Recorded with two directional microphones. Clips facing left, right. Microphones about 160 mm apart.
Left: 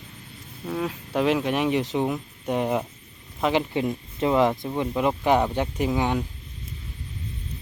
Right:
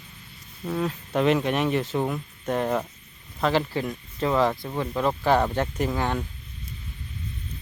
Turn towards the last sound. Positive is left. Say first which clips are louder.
# left 2 dB
turn(degrees=15)  # may be behind; listen again after turning